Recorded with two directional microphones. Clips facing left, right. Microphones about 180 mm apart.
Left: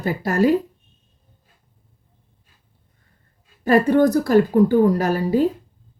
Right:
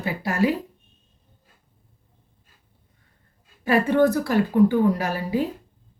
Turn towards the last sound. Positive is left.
turn(degrees=45)  # may be behind; listen again after turning